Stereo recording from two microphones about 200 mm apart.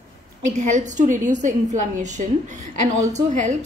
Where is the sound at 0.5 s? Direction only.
35° right (ahead or behind).